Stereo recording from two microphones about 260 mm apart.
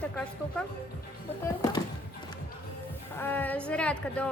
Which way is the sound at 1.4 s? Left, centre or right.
Centre.